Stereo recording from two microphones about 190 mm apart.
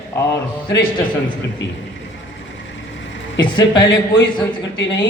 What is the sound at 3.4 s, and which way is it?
Speech, 25° left (ahead or behind).